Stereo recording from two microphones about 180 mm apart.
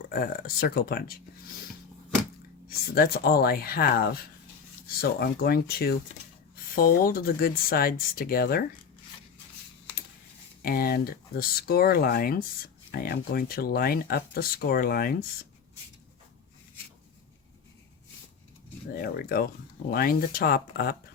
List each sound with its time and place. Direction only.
0.0 s speech: 55° left (ahead or behind)
2.6 s speech: 55° left (ahead or behind)
10.6 s speech: 55° left (ahead or behind)
18.9 s speech: 55° left (ahead or behind)